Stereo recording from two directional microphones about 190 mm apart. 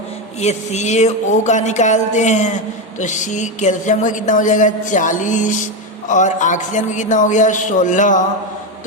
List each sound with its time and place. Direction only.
0.3 s a woman's voice: 35° left (ahead or behind)